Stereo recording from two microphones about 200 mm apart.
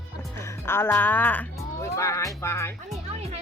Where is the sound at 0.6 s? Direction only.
10° left (ahead or behind).